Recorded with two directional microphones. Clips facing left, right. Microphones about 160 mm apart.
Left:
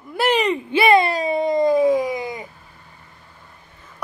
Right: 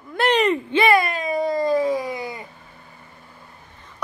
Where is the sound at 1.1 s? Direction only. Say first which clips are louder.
Left 4 dB; 35° left (ahead or behind).